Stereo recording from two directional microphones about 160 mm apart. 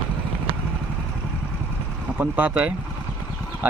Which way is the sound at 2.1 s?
10° right (ahead or behind).